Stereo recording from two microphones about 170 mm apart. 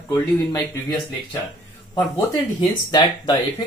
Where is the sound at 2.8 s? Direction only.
25° left (ahead or behind).